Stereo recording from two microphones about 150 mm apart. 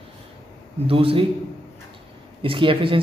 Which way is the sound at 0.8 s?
35° right (ahead or behind).